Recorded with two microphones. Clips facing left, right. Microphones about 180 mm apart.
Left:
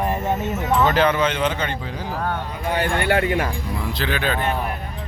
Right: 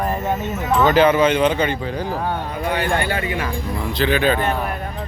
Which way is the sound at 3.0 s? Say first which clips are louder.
Left 4 dB; 60° left (ahead or behind).